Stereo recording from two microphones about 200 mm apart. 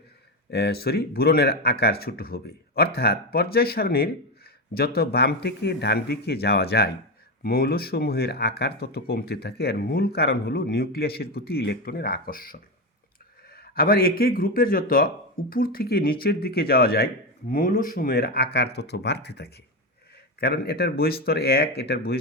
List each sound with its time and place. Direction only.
0.5 s speech: 55° left (ahead or behind)